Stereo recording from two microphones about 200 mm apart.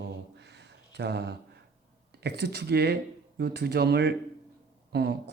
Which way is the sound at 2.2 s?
55° right (ahead or behind).